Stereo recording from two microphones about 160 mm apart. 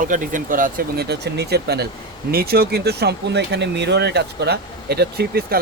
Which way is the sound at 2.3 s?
75° right (ahead or behind).